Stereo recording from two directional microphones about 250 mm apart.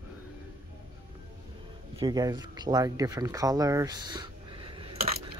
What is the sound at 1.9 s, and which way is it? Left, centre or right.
Speech, centre.